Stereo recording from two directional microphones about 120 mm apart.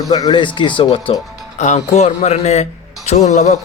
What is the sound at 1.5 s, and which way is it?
A man's voice, 75° left (ahead or behind).